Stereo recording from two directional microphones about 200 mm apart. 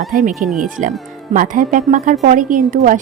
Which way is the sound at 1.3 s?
45° right (ahead or behind).